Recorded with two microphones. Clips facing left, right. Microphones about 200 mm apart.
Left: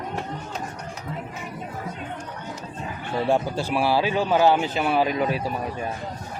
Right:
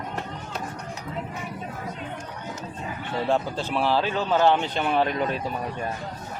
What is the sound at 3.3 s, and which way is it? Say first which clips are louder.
A man's voice: left 2 dB; 10° left (ahead or behind).